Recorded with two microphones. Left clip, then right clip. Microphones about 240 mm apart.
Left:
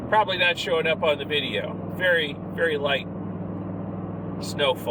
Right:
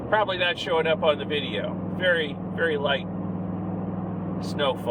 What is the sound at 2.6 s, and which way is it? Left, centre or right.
Speech, left.